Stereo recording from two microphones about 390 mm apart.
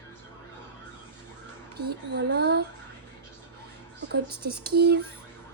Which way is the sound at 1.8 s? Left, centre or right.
Right.